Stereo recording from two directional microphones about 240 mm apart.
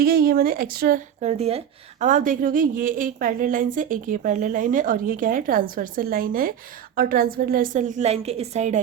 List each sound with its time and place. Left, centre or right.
0.0 s speech: right